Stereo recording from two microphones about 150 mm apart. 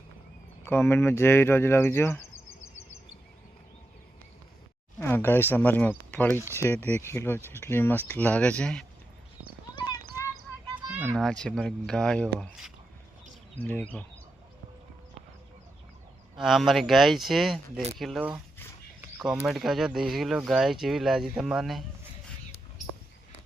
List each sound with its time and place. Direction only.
0.6 s speech: 15° left (ahead or behind)
4.9 s speech: 15° left (ahead or behind)
10.8 s children playing: 15° right (ahead or behind)
11.1 s speech: 5° left (ahead or behind)
13.6 s speech: 10° left (ahead or behind)
16.3 s speech: centre (ahead or behind)
19.0 s a sound: 5° right (ahead or behind)
19.5 s speech: centre (ahead or behind)